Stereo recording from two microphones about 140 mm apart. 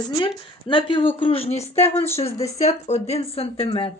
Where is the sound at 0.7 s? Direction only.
35° left (ahead or behind).